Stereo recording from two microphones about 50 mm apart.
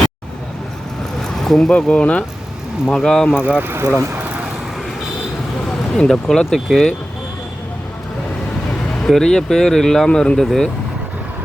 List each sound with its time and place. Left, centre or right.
1.2 s vehicle: centre
1.7 s speech: left
2.9 s speech: centre
3.3 s speech: right
3.6 s speech: right
6.1 s speech: centre
9.0 s speech: centre
10.3 s speech: centre